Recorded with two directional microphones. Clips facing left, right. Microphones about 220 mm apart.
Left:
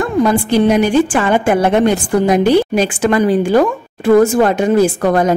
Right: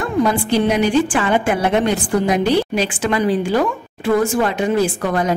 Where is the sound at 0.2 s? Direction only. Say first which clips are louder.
Left 4 dB; 45° left (ahead or behind).